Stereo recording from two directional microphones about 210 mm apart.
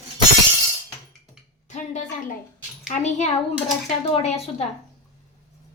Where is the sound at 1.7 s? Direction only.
35° left (ahead or behind).